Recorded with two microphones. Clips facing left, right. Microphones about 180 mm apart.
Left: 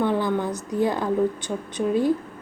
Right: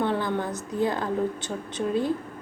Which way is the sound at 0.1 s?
15° left (ahead or behind).